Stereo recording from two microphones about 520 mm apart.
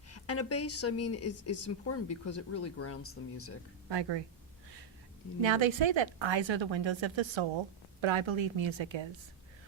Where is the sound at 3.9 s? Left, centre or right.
Right.